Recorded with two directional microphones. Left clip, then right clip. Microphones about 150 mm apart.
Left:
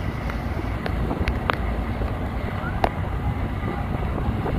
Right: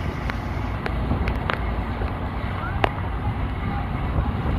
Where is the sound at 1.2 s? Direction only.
75° left (ahead or behind).